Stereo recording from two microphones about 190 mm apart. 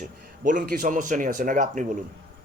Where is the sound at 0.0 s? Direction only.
45° right (ahead or behind).